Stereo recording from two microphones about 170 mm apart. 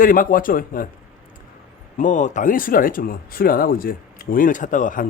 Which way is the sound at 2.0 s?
45° left (ahead or behind).